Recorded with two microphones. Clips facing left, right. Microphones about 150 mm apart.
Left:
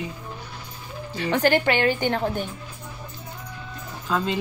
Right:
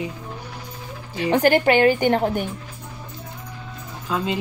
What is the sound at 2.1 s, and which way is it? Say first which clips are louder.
Speech: right 5 dB; 20° right (ahead or behind).